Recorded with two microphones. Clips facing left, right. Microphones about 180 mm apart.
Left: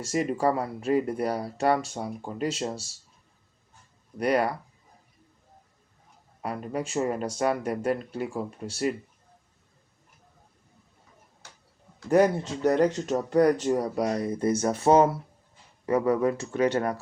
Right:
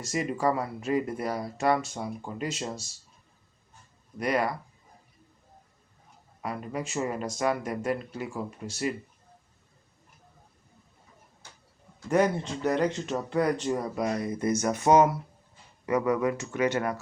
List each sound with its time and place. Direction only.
0.0 s speech: 40° left (ahead or behind)
4.2 s speech: 35° left (ahead or behind)
6.4 s speech: 35° left (ahead or behind)
12.0 s speech: 40° left (ahead or behind)